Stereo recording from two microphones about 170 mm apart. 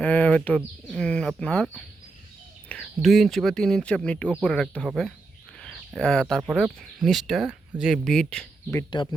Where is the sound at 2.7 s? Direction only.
Centre (ahead or behind).